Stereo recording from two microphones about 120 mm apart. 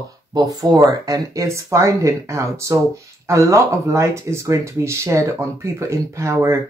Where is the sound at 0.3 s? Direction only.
35° right (ahead or behind).